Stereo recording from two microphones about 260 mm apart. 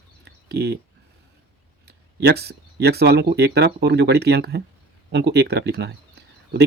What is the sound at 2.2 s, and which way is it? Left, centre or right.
Speech, right.